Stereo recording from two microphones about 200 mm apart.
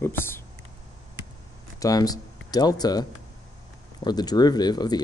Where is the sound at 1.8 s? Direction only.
20° left (ahead or behind).